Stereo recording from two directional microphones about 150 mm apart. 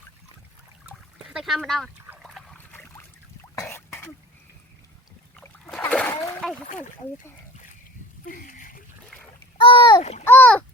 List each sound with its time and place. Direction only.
0.9 s splash: 5° right (ahead or behind)
2.1 s water: centre (ahead or behind)
2.7 s boat: 15° left (ahead or behind)
3.5 s throat clearing: 20° left (ahead or behind)
5.4 s splash: 10° left (ahead or behind)
8.2 s a sound: 65° left (ahead or behind)
9.6 s rowboat: 35° left (ahead or behind)
10.0 s a child's voice: 45° left (ahead or behind)
10.2 s a child's voice: 10° left (ahead or behind)